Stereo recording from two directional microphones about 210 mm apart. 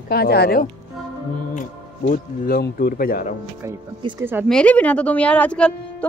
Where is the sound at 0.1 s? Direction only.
50° left (ahead or behind).